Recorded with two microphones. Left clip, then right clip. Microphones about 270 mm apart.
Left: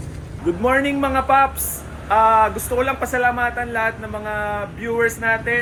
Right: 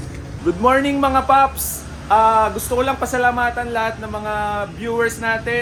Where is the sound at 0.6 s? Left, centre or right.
Centre.